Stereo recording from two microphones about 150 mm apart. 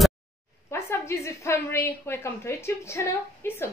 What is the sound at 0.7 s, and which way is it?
A woman's voice, 20° left (ahead or behind).